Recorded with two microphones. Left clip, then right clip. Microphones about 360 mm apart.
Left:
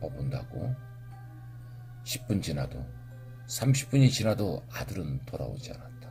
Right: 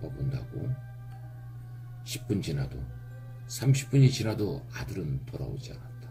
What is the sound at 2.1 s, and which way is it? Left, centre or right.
Speech, left.